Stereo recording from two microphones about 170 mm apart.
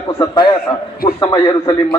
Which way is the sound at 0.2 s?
25° left (ahead or behind).